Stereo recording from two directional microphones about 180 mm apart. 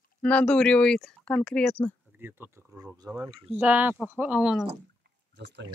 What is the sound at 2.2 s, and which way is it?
Speech, 10° right (ahead or behind).